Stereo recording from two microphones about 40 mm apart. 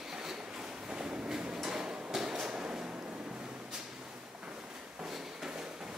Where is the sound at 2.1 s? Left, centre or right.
Centre.